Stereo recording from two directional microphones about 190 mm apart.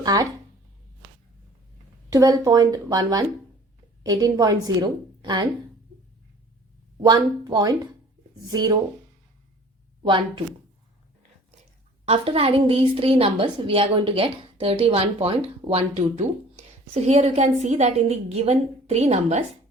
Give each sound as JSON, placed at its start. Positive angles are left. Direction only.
{"t": 0.0, "sound": "speech", "side_deg": -20}
{"t": 2.0, "sound": "a woman's voice", "side_deg": -20}
{"t": 7.0, "sound": "a woman's voice", "side_deg": -20}
{"t": 10.1, "sound": "a woman's voice", "side_deg": -25}
{"t": 12.0, "sound": "a woman's voice", "side_deg": -30}